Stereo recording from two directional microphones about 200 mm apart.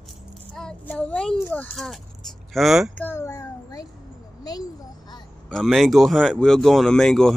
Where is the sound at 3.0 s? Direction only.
10° left (ahead or behind).